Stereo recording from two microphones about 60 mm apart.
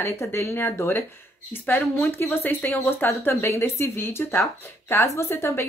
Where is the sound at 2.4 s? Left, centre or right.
Left.